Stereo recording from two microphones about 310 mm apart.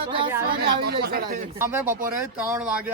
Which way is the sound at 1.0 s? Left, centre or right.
Right.